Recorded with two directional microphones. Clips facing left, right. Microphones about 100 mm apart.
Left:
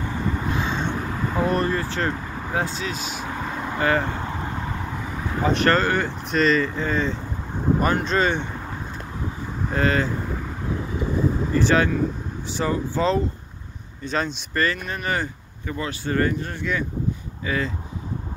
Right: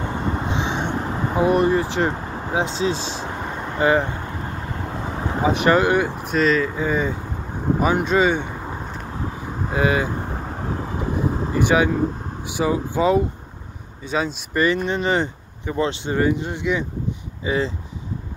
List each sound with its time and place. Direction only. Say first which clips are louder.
0.0 s vehicle: right 2 dB; 25° right (ahead or behind)
2.7 s speech: right 6 dB; 30° right (ahead or behind)
3.7 s speech: right 4 dB; 20° right (ahead or behind)
5.4 s speech: right 2 dB; 10° right (ahead or behind)
9.7 s speech: right 2 dB; 10° right (ahead or behind)
11.5 s speech: right 2 dB; 15° right (ahead or behind)